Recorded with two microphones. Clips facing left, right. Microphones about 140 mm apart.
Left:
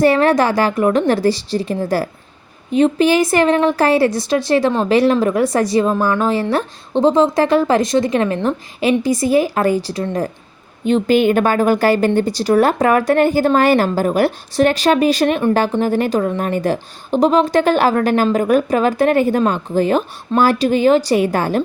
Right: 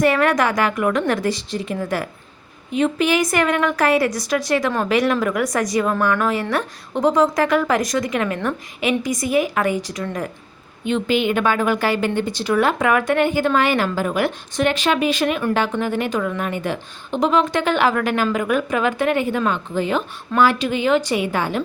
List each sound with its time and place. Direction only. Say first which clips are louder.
0.0 s speech: left 4 dB; 30° left (ahead or behind)